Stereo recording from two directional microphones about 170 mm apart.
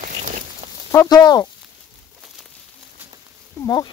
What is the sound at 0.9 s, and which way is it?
Speech, 20° left (ahead or behind).